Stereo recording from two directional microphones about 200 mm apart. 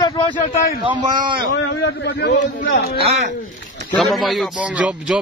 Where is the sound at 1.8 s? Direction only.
60° left (ahead or behind).